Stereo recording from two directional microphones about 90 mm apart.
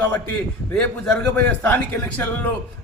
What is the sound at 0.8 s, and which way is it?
A man's voice, 10° left (ahead or behind).